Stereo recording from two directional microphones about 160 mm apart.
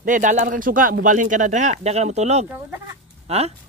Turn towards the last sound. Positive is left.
turn(degrees=-40)  # may be behind; listen again after turning